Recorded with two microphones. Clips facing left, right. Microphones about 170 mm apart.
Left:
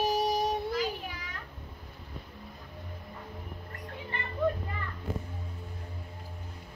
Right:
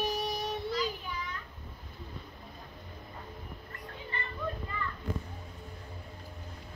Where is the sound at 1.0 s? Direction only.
85° left.